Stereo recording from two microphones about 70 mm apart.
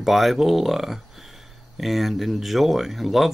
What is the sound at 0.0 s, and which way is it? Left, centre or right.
Speech, centre.